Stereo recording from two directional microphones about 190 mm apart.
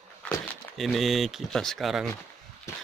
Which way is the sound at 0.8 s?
Centre (ahead or behind).